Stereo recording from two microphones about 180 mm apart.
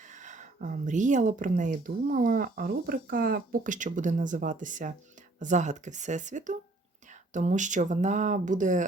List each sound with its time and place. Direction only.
0.0 s speech: 45° right (ahead or behind)